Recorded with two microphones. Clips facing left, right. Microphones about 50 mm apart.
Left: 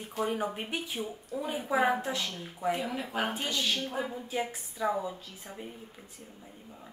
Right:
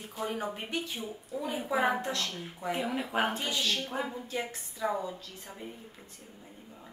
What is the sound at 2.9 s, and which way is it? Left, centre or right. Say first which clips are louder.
A woman's voice: right 2 dB; centre.